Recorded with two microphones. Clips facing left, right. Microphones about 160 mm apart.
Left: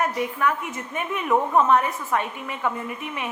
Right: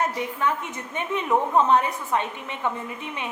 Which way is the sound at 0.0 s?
25° right (ahead or behind).